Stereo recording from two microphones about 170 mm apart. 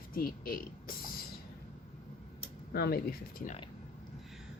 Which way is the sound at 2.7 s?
65° left (ahead or behind).